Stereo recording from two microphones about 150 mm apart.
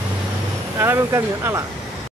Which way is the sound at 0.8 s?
15° right (ahead or behind).